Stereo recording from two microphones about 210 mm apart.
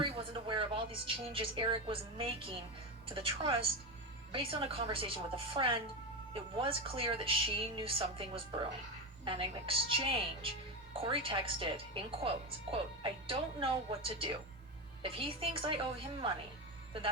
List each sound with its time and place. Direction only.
0.0 s a woman's voice: 25° right (ahead or behind)